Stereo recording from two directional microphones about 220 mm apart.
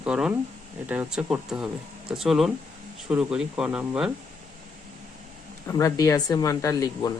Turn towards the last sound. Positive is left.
turn(degrees=15)  # may be behind; listen again after turning